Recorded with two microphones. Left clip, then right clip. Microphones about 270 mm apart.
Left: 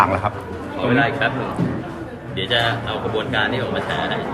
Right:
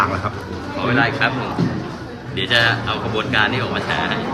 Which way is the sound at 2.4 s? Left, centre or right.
Centre.